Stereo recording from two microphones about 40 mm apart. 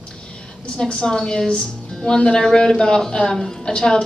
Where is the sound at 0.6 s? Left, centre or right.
Left.